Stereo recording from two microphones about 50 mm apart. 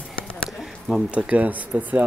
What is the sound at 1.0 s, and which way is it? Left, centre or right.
Speech, right.